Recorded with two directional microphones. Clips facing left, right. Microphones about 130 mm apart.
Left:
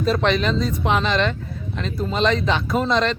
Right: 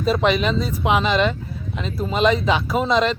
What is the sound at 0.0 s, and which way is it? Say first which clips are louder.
Speech: right 1 dB; 5° right (ahead or behind).